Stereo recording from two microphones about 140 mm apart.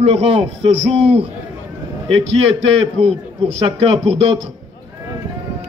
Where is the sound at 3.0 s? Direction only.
45° right (ahead or behind).